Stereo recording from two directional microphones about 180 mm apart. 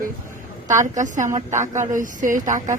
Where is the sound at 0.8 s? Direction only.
45° right (ahead or behind).